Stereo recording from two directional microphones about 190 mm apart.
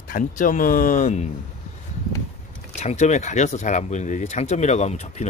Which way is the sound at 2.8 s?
35° left (ahead or behind).